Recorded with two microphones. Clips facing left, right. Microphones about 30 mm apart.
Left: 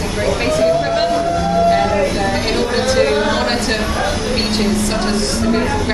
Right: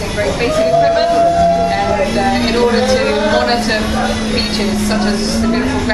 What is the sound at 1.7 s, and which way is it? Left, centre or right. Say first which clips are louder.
Music: left 1 dB; centre.